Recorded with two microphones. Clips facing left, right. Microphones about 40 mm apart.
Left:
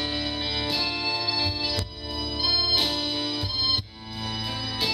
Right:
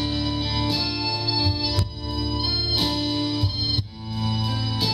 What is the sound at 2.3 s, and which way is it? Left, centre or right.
Organ, centre.